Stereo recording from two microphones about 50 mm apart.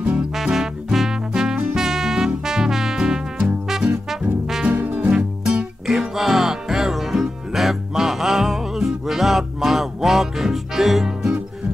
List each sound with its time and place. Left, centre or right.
0.4 s music: centre
4.8 s music: right
5.1 s music: centre